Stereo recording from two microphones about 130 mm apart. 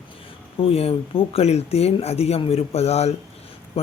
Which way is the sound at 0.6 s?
50° left (ahead or behind).